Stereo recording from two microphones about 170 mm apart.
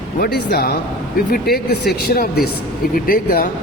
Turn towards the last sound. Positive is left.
turn(degrees=60)  # may be behind; listen again after turning